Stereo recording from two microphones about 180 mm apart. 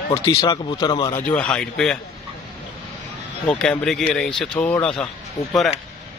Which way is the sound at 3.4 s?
5° left (ahead or behind).